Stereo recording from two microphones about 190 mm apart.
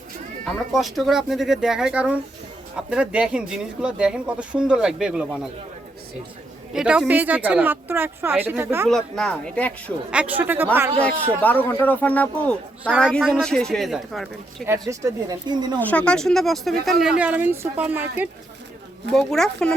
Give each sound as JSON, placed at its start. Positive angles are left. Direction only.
{"t": 0.4, "sound": "speech", "side_deg": 0}
{"t": 6.7, "sound": "speech", "side_deg": -5}
{"t": 8.9, "sound": "speech", "side_deg": 0}
{"t": 10.1, "sound": "speech", "side_deg": -5}
{"t": 11.4, "sound": "a man's voice", "side_deg": 10}
{"t": 14.7, "sound": "speech", "side_deg": -15}
{"t": 15.8, "sound": "speech", "side_deg": 5}
{"t": 19.1, "sound": "speech", "side_deg": 0}